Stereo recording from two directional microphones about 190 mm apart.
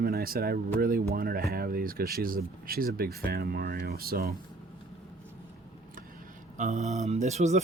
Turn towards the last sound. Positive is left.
turn(degrees=-35)  # may be behind; listen again after turning